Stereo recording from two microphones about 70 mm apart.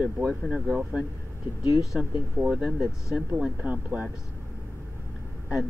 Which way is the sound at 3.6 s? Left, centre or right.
Right.